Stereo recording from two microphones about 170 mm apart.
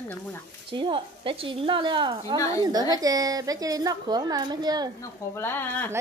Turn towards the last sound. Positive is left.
turn(degrees=10)  # may be behind; listen again after turning